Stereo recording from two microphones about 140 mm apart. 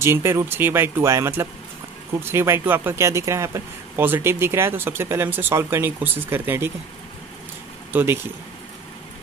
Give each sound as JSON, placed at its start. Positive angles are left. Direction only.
{"t": 0.0, "sound": "speech", "side_deg": -20}
{"t": 7.9, "sound": "speech", "side_deg": -15}